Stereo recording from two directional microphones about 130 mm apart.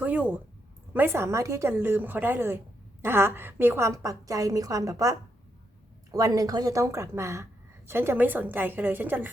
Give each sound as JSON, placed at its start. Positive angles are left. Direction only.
{"t": 0.0, "sound": "a woman's voice", "side_deg": -10}